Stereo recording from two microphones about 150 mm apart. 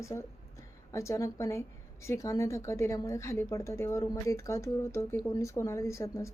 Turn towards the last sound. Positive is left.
turn(degrees=20)  # may be behind; listen again after turning